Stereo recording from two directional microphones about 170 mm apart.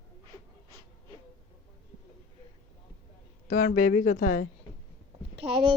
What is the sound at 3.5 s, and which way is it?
A woman's voice, 55° left (ahead or behind).